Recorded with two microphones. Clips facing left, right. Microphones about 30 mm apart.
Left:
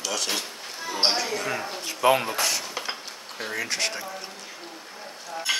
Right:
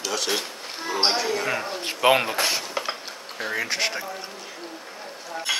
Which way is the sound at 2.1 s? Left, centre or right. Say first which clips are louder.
Right 2 dB; right.